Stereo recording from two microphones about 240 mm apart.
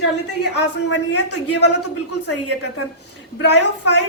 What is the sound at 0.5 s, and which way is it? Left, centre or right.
Speech, left.